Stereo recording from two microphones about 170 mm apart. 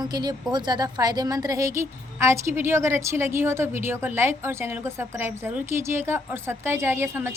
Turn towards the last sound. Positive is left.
turn(degrees=-15)  # may be behind; listen again after turning